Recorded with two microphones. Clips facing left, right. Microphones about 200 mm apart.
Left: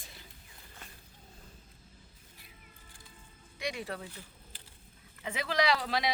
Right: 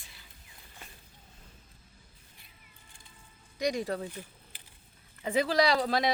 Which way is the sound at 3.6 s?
40° right (ahead or behind).